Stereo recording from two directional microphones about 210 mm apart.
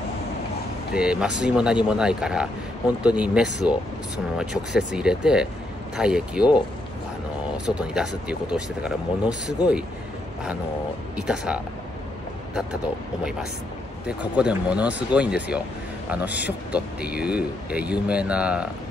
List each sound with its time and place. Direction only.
0.9 s speech: 5° right (ahead or behind)
7.5 s speech: 5° right (ahead or behind)
11.1 s speech: 5° right (ahead or behind)